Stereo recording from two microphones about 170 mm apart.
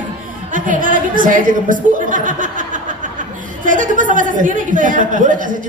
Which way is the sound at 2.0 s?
50° right (ahead or behind).